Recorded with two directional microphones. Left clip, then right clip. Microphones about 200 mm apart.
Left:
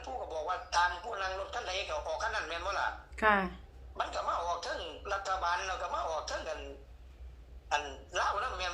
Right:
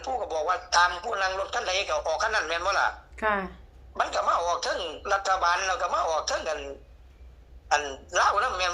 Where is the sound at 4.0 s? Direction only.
55° right (ahead or behind).